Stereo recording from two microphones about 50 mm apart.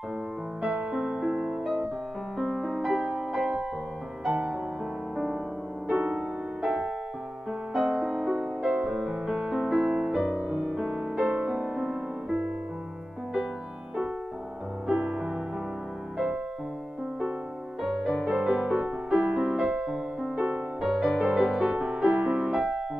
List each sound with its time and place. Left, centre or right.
0.6 s music: right
2.3 s music: centre
5.1 s music: centre
5.9 s music: right; by 8.5 s centre
8.6 s music: right
10.7 s music: centre
11.1 s music: right
14.9 s music: centre
17.8 s music: centre
18.2 s music: right
20.8 s music: centre